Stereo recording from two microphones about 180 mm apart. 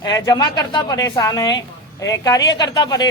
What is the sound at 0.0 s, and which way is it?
A woman's voice, 25° left (ahead or behind).